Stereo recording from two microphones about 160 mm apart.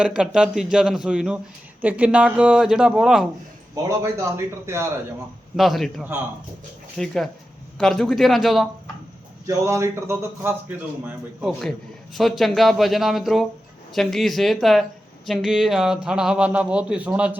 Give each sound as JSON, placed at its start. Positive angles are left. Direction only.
{"t": 0.0, "sound": "speech", "side_deg": -5}
{"t": 3.8, "sound": "a man's voice", "side_deg": -15}
{"t": 5.5, "sound": "speech", "side_deg": 0}
{"t": 9.6, "sound": "a man's voice", "side_deg": -20}